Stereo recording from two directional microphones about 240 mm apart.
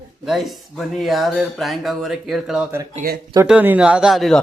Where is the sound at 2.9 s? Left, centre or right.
Right.